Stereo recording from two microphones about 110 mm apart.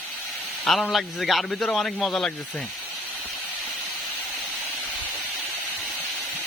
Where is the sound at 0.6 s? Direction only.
5° left (ahead or behind).